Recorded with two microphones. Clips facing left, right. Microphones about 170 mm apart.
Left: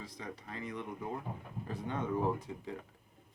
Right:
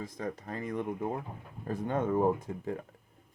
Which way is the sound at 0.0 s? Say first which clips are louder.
Right 8 dB; 45° right (ahead or behind).